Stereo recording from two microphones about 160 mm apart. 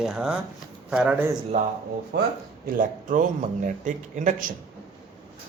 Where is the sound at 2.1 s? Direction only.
90° right.